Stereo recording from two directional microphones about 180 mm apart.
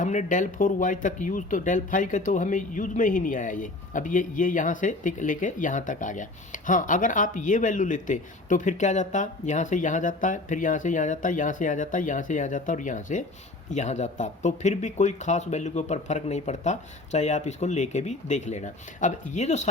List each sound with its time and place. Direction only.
0.0 s speech: 45° left (ahead or behind)